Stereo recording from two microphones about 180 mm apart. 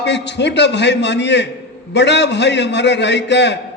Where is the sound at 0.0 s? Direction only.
75° left (ahead or behind).